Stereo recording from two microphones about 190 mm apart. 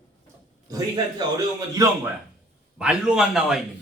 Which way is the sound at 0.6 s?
20° right (ahead or behind).